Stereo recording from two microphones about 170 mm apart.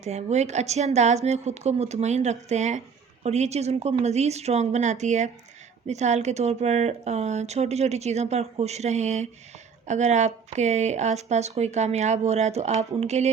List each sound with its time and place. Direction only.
0.0 s speech: 40° right (ahead or behind)